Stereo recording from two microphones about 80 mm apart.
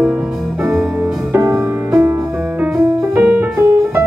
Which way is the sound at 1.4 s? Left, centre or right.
Right.